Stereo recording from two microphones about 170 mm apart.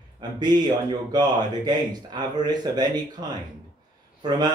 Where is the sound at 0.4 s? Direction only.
25° right (ahead or behind).